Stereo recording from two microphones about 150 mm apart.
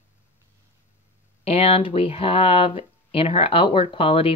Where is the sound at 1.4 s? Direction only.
45° left (ahead or behind).